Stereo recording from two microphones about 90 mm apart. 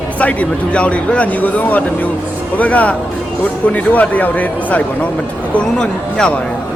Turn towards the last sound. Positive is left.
turn(degrees=10)  # may be behind; listen again after turning